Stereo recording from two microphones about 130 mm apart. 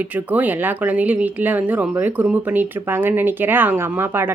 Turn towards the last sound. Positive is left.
turn(degrees=-15)  # may be behind; listen again after turning